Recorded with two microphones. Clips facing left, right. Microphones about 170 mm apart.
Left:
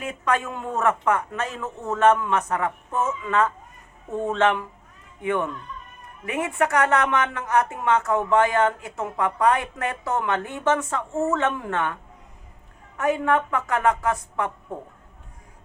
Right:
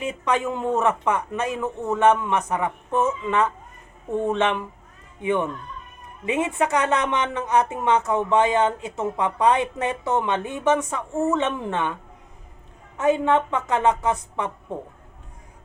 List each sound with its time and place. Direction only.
0.0 s a woman's voice: 20° right (ahead or behind)
13.0 s a woman's voice: 25° right (ahead or behind)